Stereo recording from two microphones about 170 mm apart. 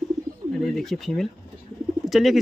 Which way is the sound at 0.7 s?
Centre (ahead or behind).